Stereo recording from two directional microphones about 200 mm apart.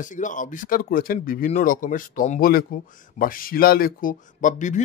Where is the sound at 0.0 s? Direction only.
40° left (ahead or behind).